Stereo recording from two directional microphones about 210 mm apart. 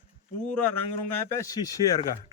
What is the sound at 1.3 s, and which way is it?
Speech, 15° left (ahead or behind).